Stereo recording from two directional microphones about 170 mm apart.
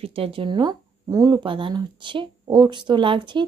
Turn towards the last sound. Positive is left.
turn(degrees=-30)  # may be behind; listen again after turning